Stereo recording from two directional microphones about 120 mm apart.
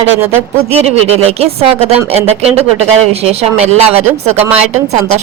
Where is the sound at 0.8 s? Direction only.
60° right (ahead or behind).